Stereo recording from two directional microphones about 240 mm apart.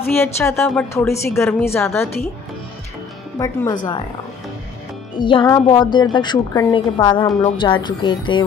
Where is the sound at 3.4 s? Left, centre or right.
Centre.